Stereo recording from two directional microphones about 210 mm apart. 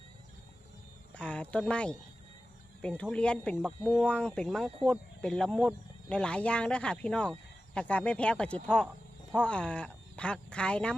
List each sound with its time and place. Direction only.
1.1 s speech: 5° left (ahead or behind)